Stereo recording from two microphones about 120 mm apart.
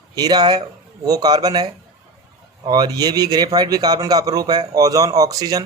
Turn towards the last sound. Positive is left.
turn(degrees=-30)  # may be behind; listen again after turning